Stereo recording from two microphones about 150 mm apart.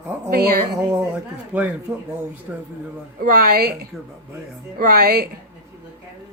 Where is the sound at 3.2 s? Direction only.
85° right.